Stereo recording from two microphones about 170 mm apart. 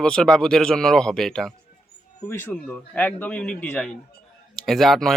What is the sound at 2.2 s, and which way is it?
A man's voice, 15° left (ahead or behind).